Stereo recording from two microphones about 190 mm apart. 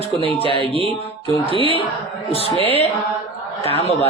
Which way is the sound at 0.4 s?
30° left (ahead or behind).